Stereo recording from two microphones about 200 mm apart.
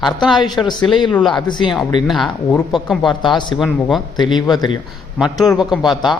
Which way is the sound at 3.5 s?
Centre (ahead or behind).